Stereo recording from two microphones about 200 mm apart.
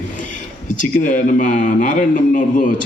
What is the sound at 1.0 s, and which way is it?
A man's voice, 40° left (ahead or behind).